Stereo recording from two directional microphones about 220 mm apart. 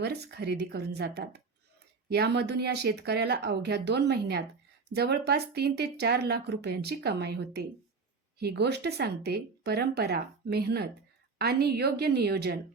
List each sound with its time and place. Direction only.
0.0 s speech: 50° right (ahead or behind)